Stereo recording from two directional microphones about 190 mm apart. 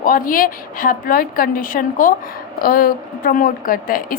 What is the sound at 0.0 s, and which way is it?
Speech, 50° left (ahead or behind).